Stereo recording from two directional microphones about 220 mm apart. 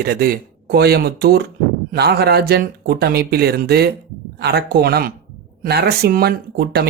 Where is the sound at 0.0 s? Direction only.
45° right (ahead or behind).